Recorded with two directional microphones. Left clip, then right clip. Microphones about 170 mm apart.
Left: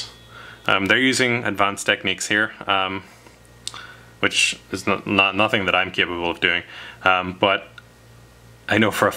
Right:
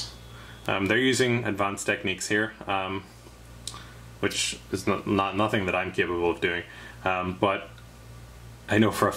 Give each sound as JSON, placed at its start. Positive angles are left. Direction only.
{"t": 0.7, "sound": "speech", "side_deg": 30}
{"t": 4.2, "sound": "speech", "side_deg": 25}
{"t": 8.6, "sound": "speech", "side_deg": 30}